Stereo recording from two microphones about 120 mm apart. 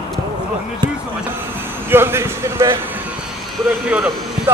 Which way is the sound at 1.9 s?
20° right (ahead or behind).